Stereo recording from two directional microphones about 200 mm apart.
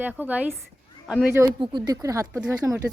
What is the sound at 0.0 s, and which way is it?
A woman's voice, 10° right (ahead or behind).